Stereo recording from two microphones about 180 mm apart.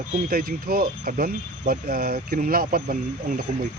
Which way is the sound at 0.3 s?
55° right (ahead or behind).